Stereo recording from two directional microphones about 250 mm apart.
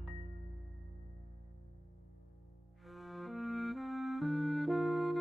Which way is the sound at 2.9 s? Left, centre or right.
Centre.